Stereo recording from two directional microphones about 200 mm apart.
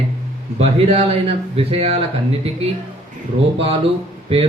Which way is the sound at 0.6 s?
30° right (ahead or behind).